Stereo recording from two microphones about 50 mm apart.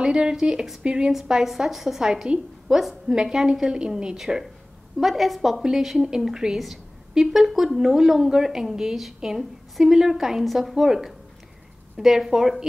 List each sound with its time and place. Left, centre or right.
0.0 s a woman's voice: centre
1.1 s a woman's voice: centre
2.8 s a woman's voice: centre
3.2 s a woman's voice: centre
5.0 s a woman's voice: centre